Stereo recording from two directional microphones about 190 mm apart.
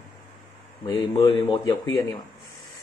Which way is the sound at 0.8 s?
20° left (ahead or behind).